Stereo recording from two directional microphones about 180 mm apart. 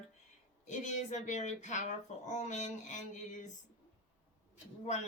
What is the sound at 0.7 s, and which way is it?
Speech, 40° left (ahead or behind).